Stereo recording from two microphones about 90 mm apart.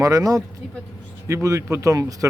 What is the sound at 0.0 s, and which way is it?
Speech, 40° right (ahead or behind).